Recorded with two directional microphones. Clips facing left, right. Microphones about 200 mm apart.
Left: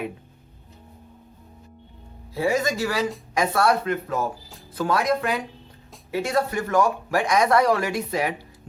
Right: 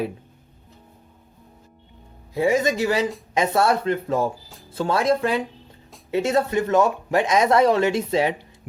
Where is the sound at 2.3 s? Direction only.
20° right (ahead or behind).